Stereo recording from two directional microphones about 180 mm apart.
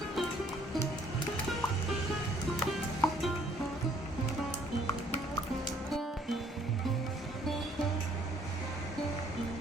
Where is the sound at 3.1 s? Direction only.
Centre (ahead or behind).